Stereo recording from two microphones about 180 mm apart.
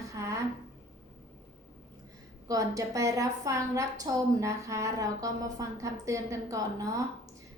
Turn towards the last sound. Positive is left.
turn(degrees=-20)  # may be behind; listen again after turning